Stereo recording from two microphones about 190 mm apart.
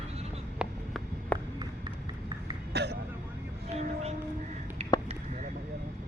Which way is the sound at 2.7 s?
60° right (ahead or behind).